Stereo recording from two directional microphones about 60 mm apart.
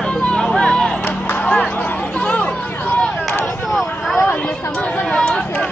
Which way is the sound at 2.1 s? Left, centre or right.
Left.